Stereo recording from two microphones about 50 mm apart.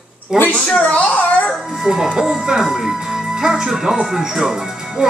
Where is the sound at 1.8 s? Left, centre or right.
Centre.